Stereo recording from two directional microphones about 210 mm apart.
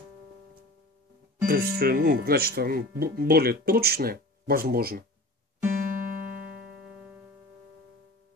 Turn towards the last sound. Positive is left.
turn(degrees=-5)  # may be behind; listen again after turning